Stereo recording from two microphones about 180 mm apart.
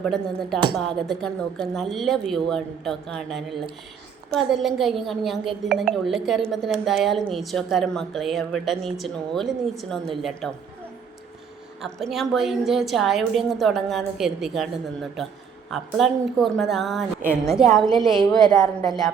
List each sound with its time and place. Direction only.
0.0 s a woman's voice: centre (ahead or behind)
11.8 s a woman's voice: centre (ahead or behind)
15.7 s a woman's voice: centre (ahead or behind)
18.3 s a woman's voice: 20° left (ahead or behind)